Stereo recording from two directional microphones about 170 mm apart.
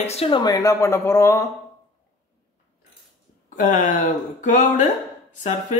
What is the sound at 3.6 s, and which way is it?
A man's voice, 45° left (ahead or behind).